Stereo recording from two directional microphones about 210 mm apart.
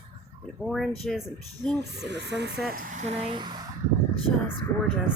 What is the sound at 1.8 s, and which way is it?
Speech, 55° right (ahead or behind).